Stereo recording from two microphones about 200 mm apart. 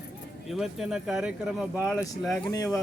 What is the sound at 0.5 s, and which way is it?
Speech, centre (ahead or behind).